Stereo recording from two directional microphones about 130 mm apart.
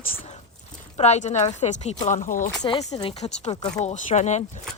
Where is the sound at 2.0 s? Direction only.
85° left.